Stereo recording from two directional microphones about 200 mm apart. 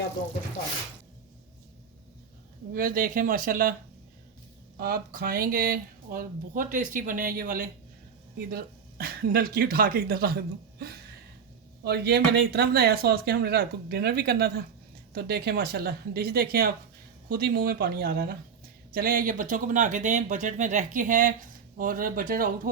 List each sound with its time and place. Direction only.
2.7 s speech: 45° right (ahead or behind)
4.8 s speech: 50° right (ahead or behind)